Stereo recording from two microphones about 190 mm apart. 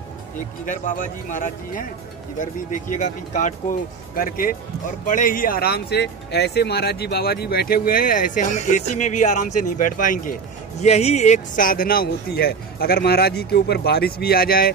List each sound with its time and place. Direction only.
0.7 s speech: 45° left (ahead or behind)
10.8 s speech: 35° left (ahead or behind); by 14.7 s 50° left (ahead or behind)